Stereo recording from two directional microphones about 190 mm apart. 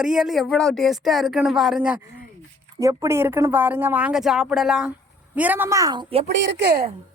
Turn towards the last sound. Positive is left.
turn(degrees=-55)  # may be behind; listen again after turning